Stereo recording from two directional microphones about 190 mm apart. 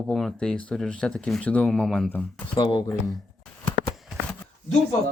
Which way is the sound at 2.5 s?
25° left (ahead or behind).